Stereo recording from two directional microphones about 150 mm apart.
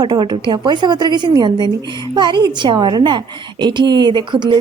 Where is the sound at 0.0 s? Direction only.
30° right (ahead or behind).